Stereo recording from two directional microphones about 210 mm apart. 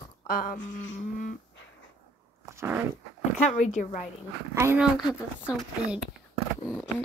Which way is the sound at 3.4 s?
35° left (ahead or behind).